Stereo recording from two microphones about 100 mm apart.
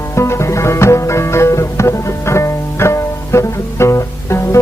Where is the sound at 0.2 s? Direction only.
30° left (ahead or behind).